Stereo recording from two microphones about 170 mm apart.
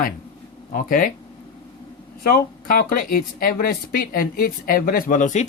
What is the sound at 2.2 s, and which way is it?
Speech, 60° left (ahead or behind).